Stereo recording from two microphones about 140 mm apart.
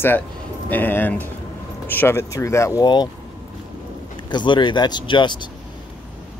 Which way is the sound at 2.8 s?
30° left (ahead or behind).